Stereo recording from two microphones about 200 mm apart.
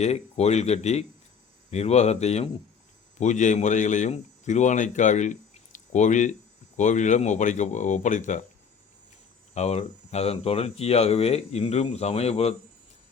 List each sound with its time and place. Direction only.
0.0 s a man's voice: 35° left (ahead or behind)
9.6 s speech: 35° left (ahead or behind)